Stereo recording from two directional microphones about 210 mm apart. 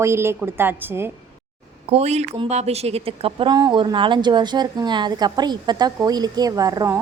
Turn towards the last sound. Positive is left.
turn(degrees=-15)  # may be behind; listen again after turning